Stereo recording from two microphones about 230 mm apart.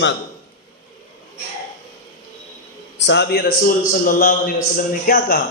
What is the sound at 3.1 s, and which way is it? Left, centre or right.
A man's voice, left.